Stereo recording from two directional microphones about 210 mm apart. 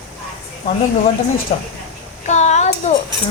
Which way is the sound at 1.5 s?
30° left (ahead or behind).